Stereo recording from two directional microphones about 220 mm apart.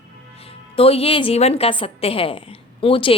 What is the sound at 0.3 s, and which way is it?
A woman's voice, 25° left (ahead or behind).